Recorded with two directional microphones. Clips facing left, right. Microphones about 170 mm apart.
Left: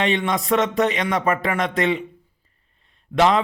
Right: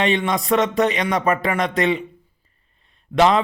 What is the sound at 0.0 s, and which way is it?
A man's voice, 20° right (ahead or behind).